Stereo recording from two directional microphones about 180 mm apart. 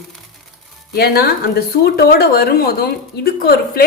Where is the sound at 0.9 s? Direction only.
60° left (ahead or behind).